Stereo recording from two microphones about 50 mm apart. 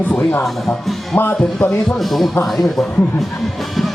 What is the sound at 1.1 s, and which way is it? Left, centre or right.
Speech, left.